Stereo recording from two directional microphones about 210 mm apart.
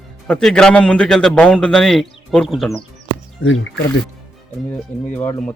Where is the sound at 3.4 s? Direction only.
60° left (ahead or behind).